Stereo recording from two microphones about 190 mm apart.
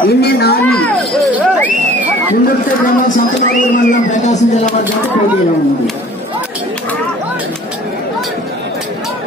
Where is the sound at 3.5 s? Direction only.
45° left (ahead or behind).